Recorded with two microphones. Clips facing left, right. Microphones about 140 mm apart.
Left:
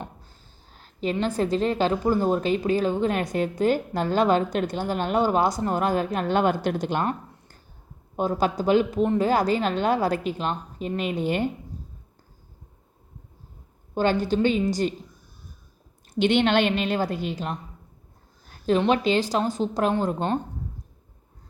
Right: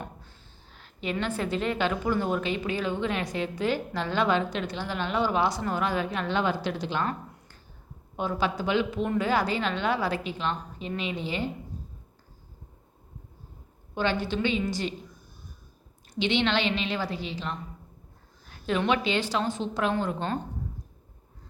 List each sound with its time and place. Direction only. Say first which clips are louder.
0.2 s a sound: even; 40° left (ahead or behind)
1.2 s a woman's voice: left 6 dB; 40° left (ahead or behind)
8.1 s a woman's voice: left 5 dB; 40° left (ahead or behind)
13.9 s a woman's voice: left 5 dB; 45° left (ahead or behind)
16.1 s a woman's voice: left 6 dB; 50° left (ahead or behind)
18.4 s a sound: left 6 dB; 40° left (ahead or behind)
18.9 s speech: left 5 dB; 40° left (ahead or behind)